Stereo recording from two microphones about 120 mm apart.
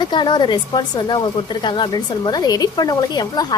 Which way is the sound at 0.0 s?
40° left (ahead or behind).